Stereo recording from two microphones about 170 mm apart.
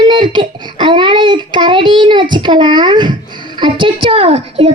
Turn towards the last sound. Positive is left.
turn(degrees=-35)  # may be behind; listen again after turning